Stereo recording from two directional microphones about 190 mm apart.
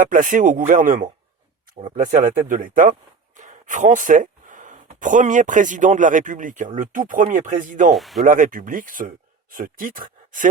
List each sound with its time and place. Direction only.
0.0 s speech: 45° right (ahead or behind)
7.9 s speech: centre (ahead or behind)
8.2 s speech: 45° right (ahead or behind)